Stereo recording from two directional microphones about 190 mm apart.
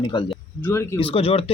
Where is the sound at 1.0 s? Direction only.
30° left (ahead or behind).